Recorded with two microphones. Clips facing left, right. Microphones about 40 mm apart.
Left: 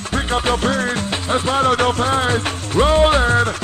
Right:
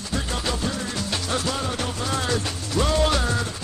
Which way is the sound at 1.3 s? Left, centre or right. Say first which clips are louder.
Left 9 dB; left.